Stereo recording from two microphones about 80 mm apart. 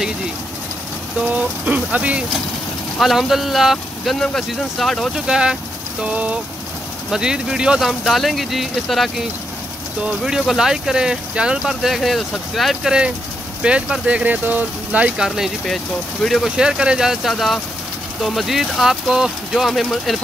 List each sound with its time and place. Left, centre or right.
1.2 s speech: centre
3.0 s speech: centre
5.1 s speech: centre
13.6 s speech: centre